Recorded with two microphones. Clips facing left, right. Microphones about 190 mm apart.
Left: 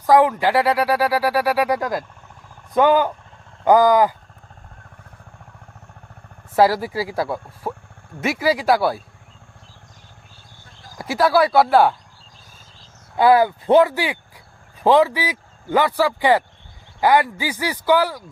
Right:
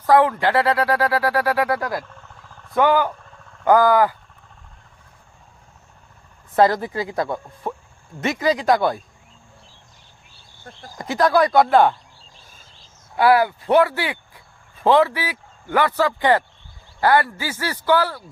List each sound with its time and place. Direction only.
0.0 s speech: 15° left (ahead or behind)
6.6 s speech: 5° left (ahead or behind)
10.9 s speech: 5° left (ahead or behind)
13.1 s speech: 20° left (ahead or behind)